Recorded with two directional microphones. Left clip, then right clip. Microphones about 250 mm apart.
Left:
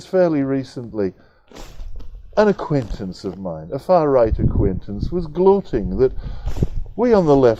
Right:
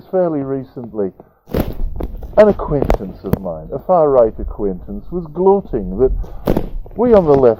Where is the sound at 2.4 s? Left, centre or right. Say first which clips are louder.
Right 6 dB; left.